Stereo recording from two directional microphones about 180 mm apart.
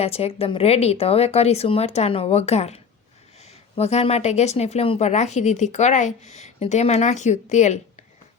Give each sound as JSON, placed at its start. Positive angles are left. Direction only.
{"t": 0.0, "sound": "speech", "side_deg": 35}